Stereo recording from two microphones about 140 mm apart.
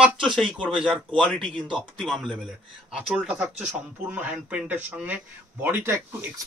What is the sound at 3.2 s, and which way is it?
Speech, 10° right (ahead or behind).